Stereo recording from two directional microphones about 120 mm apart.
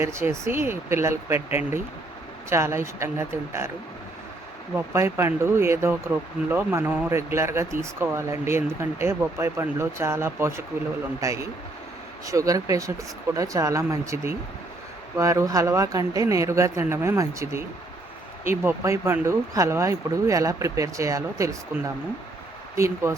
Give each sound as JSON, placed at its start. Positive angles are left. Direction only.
{"t": 0.0, "sound": "speech", "side_deg": -25}
{"t": 4.7, "sound": "speech", "side_deg": -20}
{"t": 23.1, "sound": "speech", "side_deg": -20}